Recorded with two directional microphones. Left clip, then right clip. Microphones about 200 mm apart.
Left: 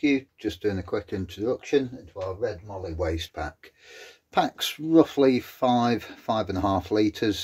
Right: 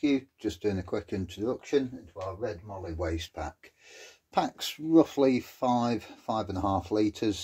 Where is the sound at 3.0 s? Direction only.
20° left (ahead or behind).